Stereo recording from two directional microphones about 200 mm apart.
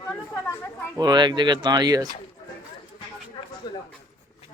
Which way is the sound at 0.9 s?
20° right (ahead or behind).